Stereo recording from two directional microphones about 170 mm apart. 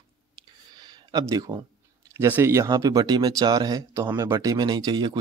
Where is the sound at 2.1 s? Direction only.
15° right (ahead or behind).